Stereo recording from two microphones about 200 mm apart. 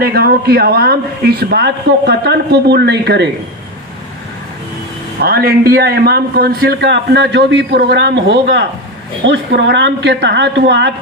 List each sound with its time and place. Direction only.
0.0 s a man's voice: 50° right (ahead or behind)
5.2 s a man's voice: 50° right (ahead or behind)